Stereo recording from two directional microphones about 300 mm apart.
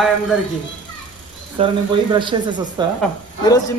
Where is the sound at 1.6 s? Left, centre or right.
Centre.